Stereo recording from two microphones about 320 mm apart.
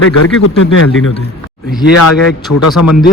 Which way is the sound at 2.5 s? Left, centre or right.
Left.